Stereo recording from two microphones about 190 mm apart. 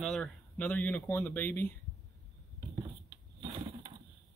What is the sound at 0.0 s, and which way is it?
Speech, 5° left (ahead or behind).